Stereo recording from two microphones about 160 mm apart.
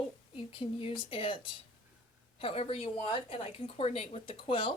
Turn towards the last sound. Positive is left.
turn(degrees=30)  # may be behind; listen again after turning